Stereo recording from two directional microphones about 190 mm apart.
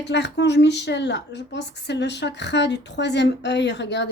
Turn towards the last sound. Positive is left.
turn(degrees=65)  # may be behind; listen again after turning